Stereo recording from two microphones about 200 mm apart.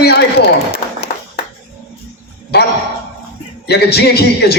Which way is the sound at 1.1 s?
50° left (ahead or behind).